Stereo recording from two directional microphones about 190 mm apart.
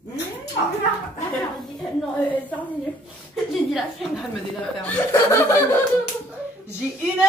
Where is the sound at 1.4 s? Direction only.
Centre (ahead or behind).